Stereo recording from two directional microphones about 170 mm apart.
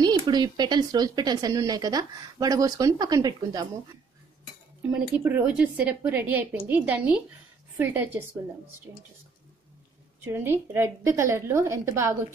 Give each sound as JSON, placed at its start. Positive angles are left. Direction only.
{"t": 0.0, "sound": "speech", "side_deg": -25}
{"t": 4.9, "sound": "a woman's voice", "side_deg": -10}
{"t": 10.2, "sound": "a woman's voice", "side_deg": -15}